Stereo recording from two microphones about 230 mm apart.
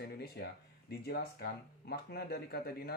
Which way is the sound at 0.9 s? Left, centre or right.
Left.